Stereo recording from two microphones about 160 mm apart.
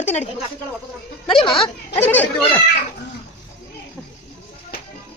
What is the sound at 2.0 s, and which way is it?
Speech, 10° left (ahead or behind).